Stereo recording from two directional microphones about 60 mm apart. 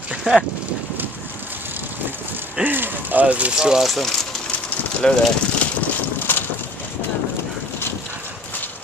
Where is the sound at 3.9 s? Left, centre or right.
Centre.